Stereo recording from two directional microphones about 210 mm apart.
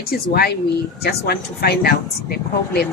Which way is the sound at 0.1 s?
50° left (ahead or behind).